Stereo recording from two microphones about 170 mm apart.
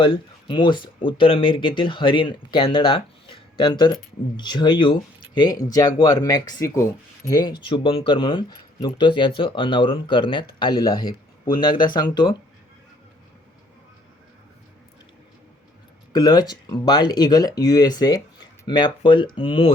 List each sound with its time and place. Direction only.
0.0 s speech: 25° left (ahead or behind)
16.1 s speech: 25° left (ahead or behind)